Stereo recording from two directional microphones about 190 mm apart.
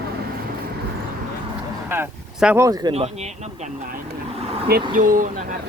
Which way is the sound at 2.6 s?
20° right (ahead or behind).